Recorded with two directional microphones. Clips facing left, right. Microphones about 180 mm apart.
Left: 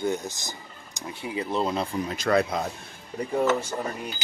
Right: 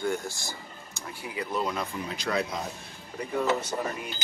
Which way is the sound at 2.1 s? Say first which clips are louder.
Left 7 dB; 50° left (ahead or behind).